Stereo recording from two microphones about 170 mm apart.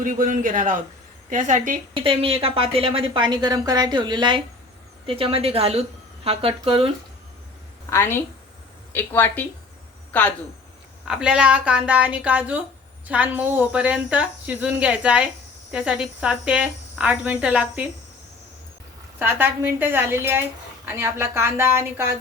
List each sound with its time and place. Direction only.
0.0 s speech: 50° right (ahead or behind)
2.0 s a woman's voice: 30° right (ahead or behind)
7.9 s a woman's voice: 15° left (ahead or behind)
11.1 s speech: 5° right (ahead or behind)
19.2 s speech: 15° right (ahead or behind)